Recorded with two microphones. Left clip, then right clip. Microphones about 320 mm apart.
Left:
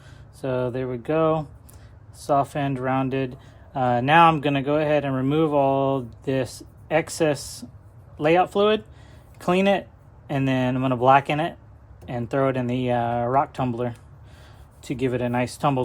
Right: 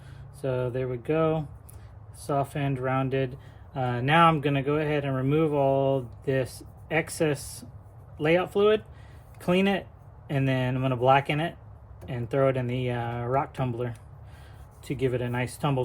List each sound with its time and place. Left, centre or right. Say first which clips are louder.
0.4 s speech: left 3 dB; centre